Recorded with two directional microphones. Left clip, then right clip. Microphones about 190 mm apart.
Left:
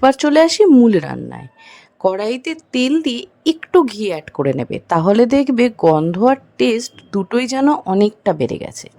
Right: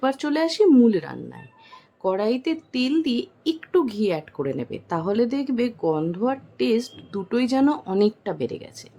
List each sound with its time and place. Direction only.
0.0 s a woman's voice: 40° left (ahead or behind)